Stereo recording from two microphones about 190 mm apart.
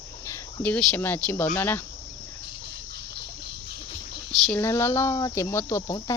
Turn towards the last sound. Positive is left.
turn(degrees=15)  # may be behind; listen again after turning